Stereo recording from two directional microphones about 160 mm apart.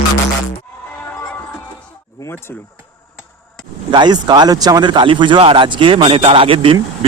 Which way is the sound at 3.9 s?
30° right (ahead or behind).